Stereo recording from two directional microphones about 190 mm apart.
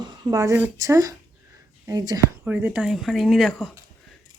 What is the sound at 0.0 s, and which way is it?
A woman's voice, 20° right (ahead or behind).